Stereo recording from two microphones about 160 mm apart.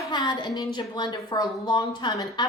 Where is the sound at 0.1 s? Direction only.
25° left (ahead or behind).